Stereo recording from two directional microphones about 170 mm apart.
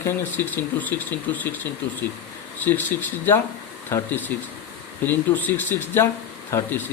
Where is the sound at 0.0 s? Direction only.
10° left (ahead or behind).